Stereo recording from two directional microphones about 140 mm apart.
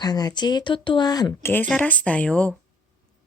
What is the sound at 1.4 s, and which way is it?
Speech, 15° left (ahead or behind).